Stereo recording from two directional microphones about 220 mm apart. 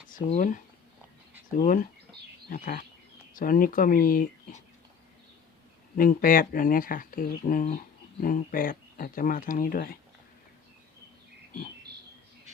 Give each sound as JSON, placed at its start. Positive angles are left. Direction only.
{"t": 0.1, "sound": "speech", "side_deg": 35}
{"t": 6.0, "sound": "speech", "side_deg": 40}